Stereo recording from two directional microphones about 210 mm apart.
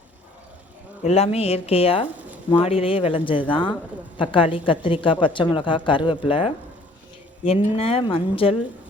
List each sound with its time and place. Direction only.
1.0 s a woman's voice: 30° left (ahead or behind)